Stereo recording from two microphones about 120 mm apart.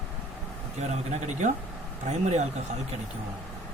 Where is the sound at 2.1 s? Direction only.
70° right (ahead or behind).